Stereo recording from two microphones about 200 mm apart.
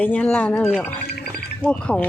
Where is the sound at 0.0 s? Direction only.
5° left (ahead or behind).